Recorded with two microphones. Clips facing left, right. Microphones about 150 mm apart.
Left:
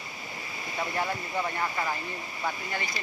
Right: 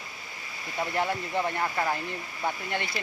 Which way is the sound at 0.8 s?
30° right (ahead or behind).